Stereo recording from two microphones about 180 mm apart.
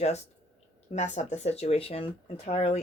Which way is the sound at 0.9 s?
40° left (ahead or behind).